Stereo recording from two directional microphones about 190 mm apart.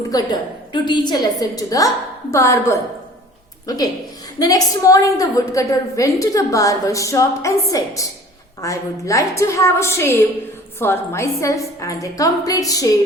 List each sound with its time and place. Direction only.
0.1 s a woman's voice: 20° left (ahead or behind)
4.4 s a woman's voice: 20° left (ahead or behind)